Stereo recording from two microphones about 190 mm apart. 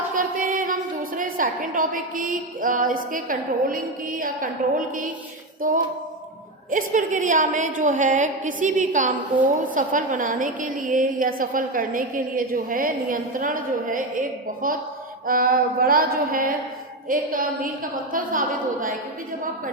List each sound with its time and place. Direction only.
0.1 s a woman's voice: 45° right (ahead or behind)
5.6 s a woman's voice: 45° right (ahead or behind)